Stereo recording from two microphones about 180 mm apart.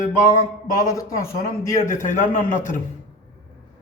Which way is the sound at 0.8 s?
15° left (ahead or behind).